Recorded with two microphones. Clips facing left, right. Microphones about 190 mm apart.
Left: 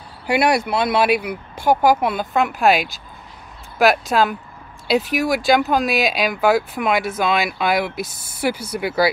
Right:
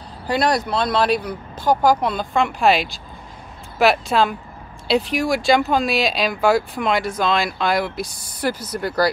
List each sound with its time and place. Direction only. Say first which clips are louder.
0.3 s speech: left 2 dB; 10° left (ahead or behind)
8.1 s speech: right 1 dB; 25° left (ahead or behind)
8.4 s speech: left 1 dB; 10° left (ahead or behind)